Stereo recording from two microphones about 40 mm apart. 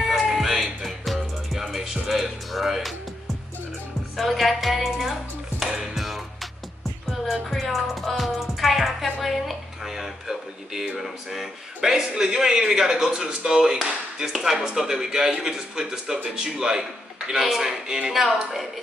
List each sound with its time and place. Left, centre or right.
0.0 s music: centre
4.2 s music: centre
5.6 s music: centre
11.0 s a man's voice: centre